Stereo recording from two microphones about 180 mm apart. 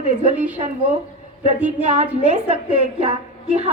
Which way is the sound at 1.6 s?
40° right (ahead or behind).